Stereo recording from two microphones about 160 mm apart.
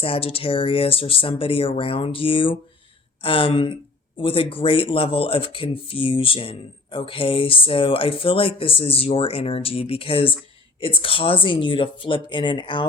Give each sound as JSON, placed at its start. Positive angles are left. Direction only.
{"t": 0.0, "sound": "speech", "side_deg": 35}